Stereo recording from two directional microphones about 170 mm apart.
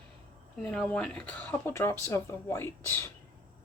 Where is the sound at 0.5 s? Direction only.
5° left (ahead or behind).